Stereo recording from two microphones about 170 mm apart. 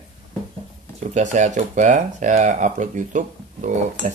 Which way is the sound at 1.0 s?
45° right (ahead or behind).